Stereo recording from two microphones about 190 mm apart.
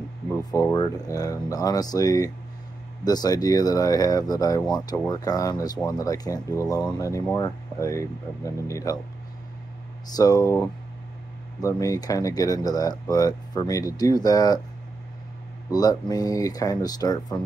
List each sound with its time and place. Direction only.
0.4 s speech: 20° left (ahead or behind)
10.1 s speech: 20° left (ahead or behind)
11.6 s speech: 20° left (ahead or behind)
15.7 s speech: 20° left (ahead or behind)